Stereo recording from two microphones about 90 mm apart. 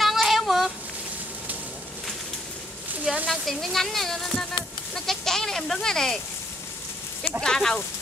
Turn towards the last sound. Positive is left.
turn(degrees=5)  # may be behind; listen again after turning